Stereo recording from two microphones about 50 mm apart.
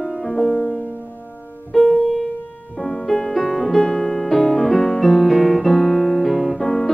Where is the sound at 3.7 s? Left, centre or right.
Centre.